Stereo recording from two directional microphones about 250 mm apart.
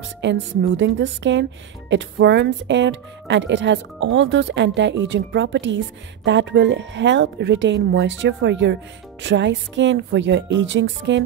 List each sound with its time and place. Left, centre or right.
0.2 s speech: right